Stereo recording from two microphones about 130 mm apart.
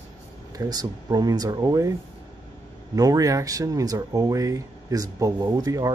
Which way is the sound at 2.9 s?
25° right (ahead or behind).